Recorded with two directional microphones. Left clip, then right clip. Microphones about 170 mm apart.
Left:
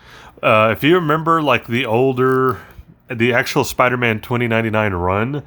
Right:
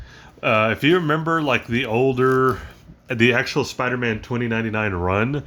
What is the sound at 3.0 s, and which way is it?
Speech, 10° left (ahead or behind).